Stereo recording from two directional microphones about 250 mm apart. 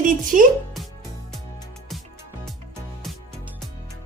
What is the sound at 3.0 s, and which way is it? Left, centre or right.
Music, centre.